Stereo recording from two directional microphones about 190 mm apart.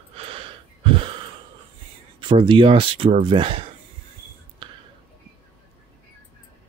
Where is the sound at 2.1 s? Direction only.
25° right (ahead or behind).